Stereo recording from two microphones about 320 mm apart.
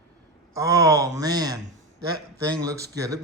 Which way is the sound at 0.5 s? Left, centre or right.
Centre.